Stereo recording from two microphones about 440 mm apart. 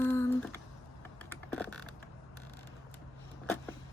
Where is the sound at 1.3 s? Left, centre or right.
Centre.